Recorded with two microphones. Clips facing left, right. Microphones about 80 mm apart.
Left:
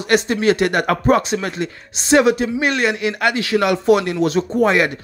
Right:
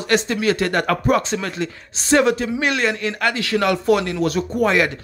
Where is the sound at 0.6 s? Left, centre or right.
Centre.